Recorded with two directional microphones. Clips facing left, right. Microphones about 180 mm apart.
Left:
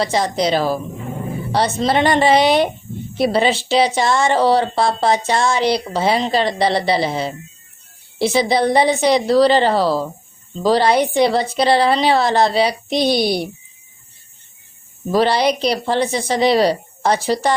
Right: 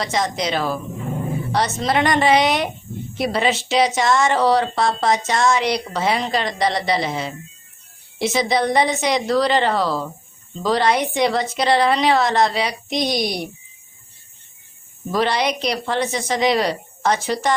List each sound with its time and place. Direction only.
0.0 s speech: 30° left (ahead or behind)
15.1 s speech: 35° left (ahead or behind)